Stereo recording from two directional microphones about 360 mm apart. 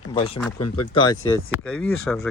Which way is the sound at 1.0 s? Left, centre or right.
Centre.